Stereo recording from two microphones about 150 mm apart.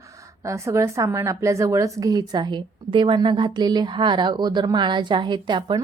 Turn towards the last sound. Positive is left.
turn(degrees=-30)  # may be behind; listen again after turning